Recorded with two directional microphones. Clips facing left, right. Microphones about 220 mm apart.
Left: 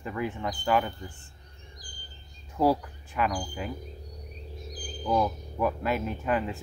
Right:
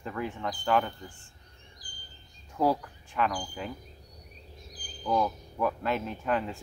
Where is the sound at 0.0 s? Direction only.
5° left (ahead or behind).